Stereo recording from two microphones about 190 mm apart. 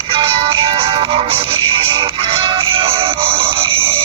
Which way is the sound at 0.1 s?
30° right (ahead or behind).